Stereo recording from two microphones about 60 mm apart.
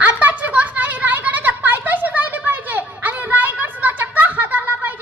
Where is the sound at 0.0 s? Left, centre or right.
Right.